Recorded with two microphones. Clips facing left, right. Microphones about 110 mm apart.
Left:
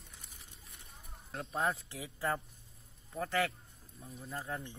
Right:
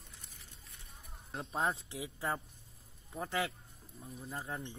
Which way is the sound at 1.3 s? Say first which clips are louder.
Left 1 dB; 25° right (ahead or behind).